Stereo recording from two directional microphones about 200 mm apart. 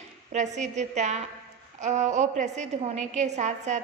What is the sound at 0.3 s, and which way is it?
A woman's voice, 35° right (ahead or behind).